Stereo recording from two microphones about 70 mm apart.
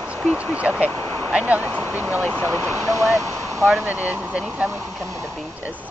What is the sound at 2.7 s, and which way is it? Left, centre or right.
Speech, right.